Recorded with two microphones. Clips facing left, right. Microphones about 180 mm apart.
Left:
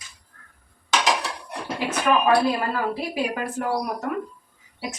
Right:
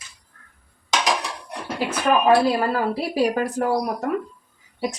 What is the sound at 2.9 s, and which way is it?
Speech, 35° right (ahead or behind).